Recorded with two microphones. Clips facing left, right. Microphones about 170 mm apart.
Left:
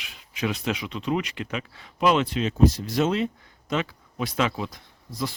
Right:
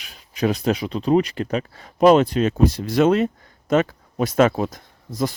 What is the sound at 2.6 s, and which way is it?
Speech, 60° right (ahead or behind).